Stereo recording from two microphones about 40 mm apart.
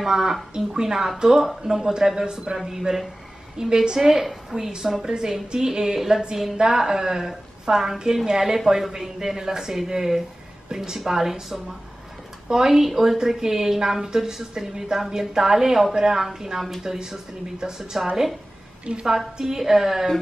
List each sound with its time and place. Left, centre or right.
0.0 s a woman's voice: centre
19.0 s a woman's voice: centre